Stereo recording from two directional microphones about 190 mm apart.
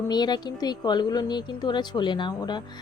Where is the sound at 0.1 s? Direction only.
20° left (ahead or behind).